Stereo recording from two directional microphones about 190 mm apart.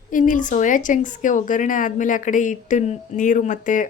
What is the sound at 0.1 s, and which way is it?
A woman's voice, 45° left (ahead or behind).